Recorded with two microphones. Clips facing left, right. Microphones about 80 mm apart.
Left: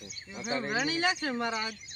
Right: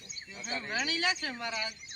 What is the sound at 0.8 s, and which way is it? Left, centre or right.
Speech, left.